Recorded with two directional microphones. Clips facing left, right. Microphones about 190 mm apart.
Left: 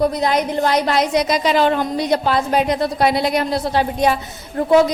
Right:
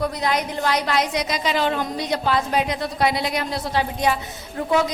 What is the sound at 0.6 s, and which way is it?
Speech, 35° left (ahead or behind).